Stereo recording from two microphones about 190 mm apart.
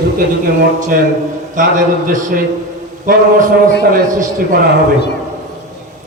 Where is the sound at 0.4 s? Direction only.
45° right (ahead or behind).